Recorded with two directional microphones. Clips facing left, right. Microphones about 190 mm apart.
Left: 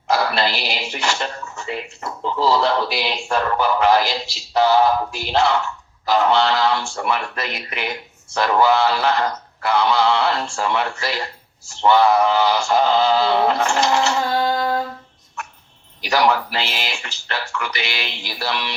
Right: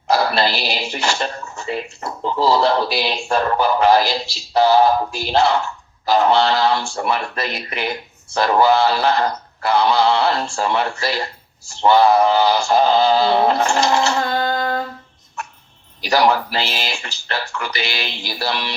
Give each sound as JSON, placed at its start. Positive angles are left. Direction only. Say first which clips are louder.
{"t": 0.1, "sound": "speech", "louder": "right 2 dB", "side_deg": -35}
{"t": 14.3, "sound": "a sound", "louder": "left 1 dB", "side_deg": 10}
{"t": 15.4, "sound": "dog", "louder": "right 2 dB", "side_deg": -35}
{"t": 16.0, "sound": "speech", "louder": "right 2 dB", "side_deg": -35}